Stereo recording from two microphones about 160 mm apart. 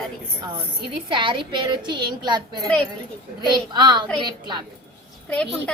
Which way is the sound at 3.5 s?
30° right (ahead or behind).